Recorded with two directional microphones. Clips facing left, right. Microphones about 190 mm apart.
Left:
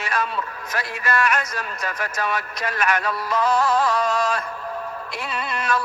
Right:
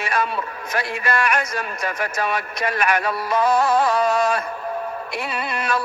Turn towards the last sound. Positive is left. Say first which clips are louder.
# right 1 dB
turn(degrees=-10)  # may be behind; listen again after turning